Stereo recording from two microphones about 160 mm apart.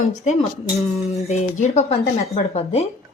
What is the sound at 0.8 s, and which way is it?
Speech, 40° left (ahead or behind).